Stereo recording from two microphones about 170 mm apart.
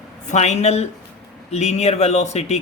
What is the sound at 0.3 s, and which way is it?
Speech, 40° left (ahead or behind).